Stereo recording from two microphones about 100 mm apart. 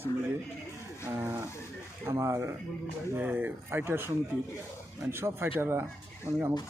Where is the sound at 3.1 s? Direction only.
15° right (ahead or behind).